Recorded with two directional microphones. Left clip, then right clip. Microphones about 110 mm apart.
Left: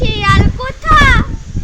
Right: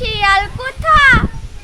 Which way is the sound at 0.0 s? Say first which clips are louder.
Right 1 dB; 30° right (ahead or behind).